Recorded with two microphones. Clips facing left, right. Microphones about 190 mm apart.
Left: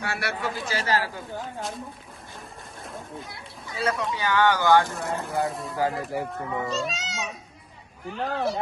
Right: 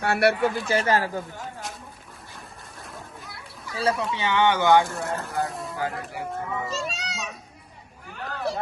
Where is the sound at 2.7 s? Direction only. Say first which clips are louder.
Left 4 dB; 25° left (ahead or behind).